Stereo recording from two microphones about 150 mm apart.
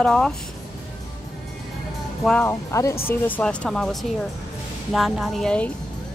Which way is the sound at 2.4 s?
20° left (ahead or behind).